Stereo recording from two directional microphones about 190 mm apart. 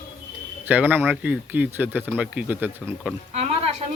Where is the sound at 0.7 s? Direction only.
10° right (ahead or behind).